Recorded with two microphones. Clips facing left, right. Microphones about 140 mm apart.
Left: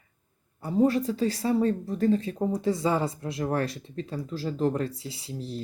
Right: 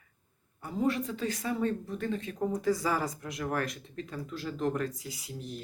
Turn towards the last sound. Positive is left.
turn(degrees=30)  # may be behind; listen again after turning